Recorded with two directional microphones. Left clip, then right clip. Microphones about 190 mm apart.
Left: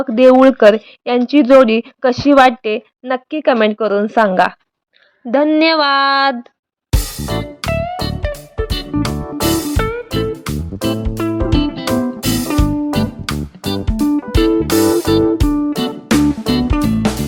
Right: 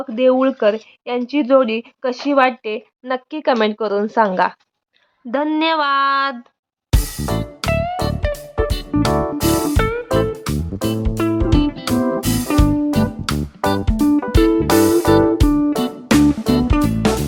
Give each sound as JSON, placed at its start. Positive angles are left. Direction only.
{"t": 0.0, "sound": "speech", "side_deg": 30}
{"t": 3.0, "sound": "speech", "side_deg": 15}
{"t": 5.5, "sound": "speech", "side_deg": 15}
{"t": 6.9, "sound": "music", "side_deg": 0}